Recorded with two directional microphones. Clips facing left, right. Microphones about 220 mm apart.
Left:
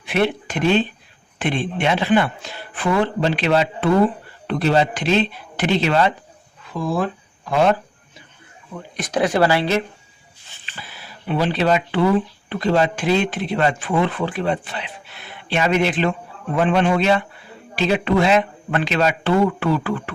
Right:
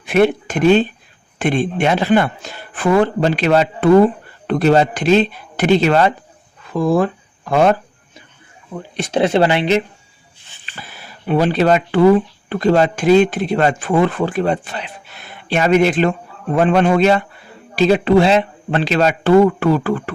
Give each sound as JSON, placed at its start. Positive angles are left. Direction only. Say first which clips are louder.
{"t": 0.0, "sound": "speech", "louder": "right 6 dB", "side_deg": -45}
{"t": 8.7, "sound": "speech", "louder": "right 4 dB", "side_deg": -30}
{"t": 11.3, "sound": "speech", "louder": "right 5 dB", "side_deg": -45}